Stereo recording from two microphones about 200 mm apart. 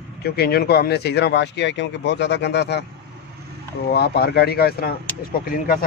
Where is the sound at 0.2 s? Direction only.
50° left (ahead or behind).